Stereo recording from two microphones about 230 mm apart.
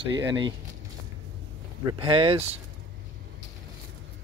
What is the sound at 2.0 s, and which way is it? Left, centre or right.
Speech, right.